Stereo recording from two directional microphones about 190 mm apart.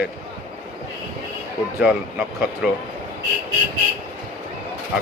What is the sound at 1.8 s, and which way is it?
Speech, 5° right (ahead or behind).